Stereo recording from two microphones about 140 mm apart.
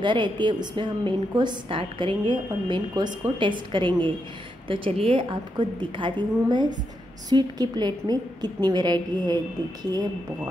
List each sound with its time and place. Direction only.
0.0 s a woman's voice: 35° right (ahead or behind)